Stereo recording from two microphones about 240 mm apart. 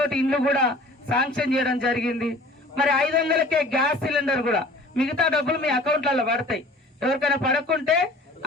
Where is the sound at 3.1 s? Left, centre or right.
Right.